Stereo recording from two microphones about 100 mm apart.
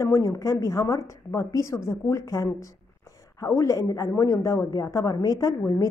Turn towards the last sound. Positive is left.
turn(degrees=30)  # may be behind; listen again after turning